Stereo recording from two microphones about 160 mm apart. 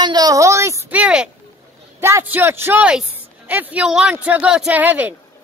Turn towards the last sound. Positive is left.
turn(degrees=-10)  # may be behind; listen again after turning